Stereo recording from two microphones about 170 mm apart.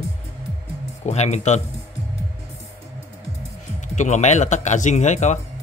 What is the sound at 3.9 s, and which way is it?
Speech, 45° left (ahead or behind).